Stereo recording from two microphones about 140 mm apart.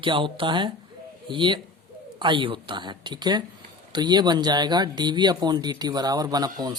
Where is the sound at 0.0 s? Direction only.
35° right (ahead or behind).